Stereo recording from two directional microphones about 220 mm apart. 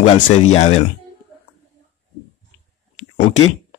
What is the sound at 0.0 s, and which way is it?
Speech, 30° left (ahead or behind).